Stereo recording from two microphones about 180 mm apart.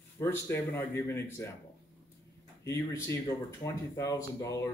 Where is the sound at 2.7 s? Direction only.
15° left (ahead or behind).